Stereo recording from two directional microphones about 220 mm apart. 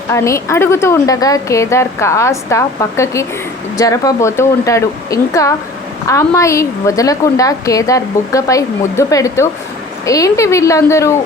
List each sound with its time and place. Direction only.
0.1 s a woman's voice: 15° left (ahead or behind)